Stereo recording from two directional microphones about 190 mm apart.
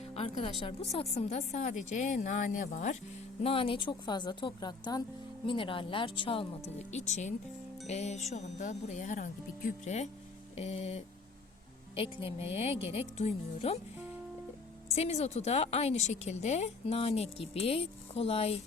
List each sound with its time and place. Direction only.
0.1 s music: 30° left (ahead or behind)
0.6 s a woman's voice: 30° left (ahead or behind)
3.4 s a woman's voice: 30° left (ahead or behind)
14.9 s a woman's voice: 35° left (ahead or behind)